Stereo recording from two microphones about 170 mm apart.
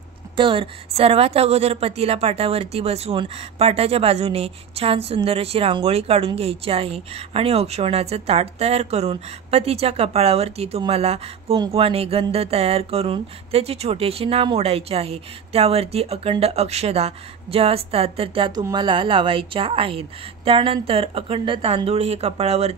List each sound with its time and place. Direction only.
0.4 s a woman's voice: 30° right (ahead or behind)